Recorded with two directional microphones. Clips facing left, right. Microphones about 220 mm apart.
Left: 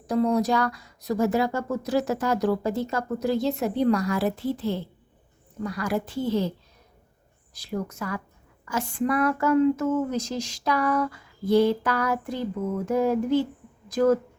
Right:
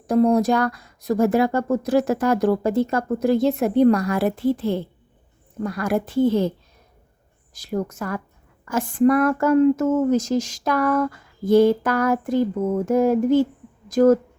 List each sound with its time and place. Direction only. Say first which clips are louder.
0.1 s speech: right 5 dB; 50° right (ahead or behind)
7.5 s speech: right 5 dB; 45° right (ahead or behind)